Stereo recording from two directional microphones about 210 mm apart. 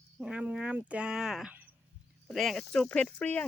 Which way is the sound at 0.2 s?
5° right (ahead or behind).